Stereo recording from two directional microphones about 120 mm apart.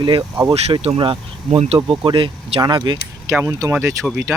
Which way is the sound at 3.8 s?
5° right (ahead or behind).